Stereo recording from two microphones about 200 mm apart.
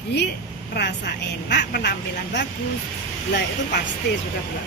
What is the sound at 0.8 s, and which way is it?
Speech, 55° left (ahead or behind).